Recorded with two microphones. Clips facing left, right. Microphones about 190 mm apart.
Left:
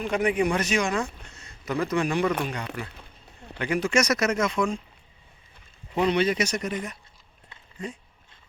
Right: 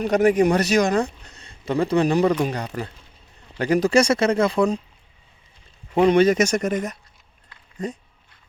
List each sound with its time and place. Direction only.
0.0 s speech: 40° right (ahead or behind)
5.9 s speech: 45° right (ahead or behind)